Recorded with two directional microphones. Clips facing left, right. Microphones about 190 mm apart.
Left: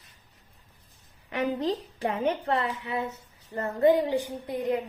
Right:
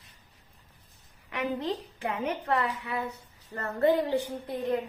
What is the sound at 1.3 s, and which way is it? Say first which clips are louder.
A woman's voice: left 3 dB; 35° left (ahead or behind).